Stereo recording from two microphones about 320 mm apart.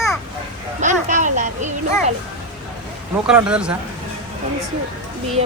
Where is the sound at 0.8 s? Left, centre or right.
Right.